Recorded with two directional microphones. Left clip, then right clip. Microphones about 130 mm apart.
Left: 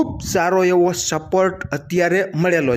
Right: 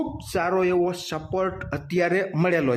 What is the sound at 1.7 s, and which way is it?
Speech, 30° left (ahead or behind).